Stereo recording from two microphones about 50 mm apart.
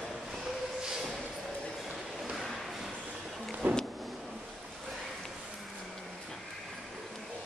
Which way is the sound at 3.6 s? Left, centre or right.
Right.